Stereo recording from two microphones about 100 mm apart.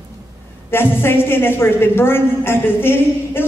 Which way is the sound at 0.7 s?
25° left (ahead or behind).